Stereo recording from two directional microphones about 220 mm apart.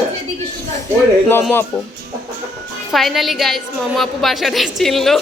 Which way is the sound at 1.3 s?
10° left (ahead or behind).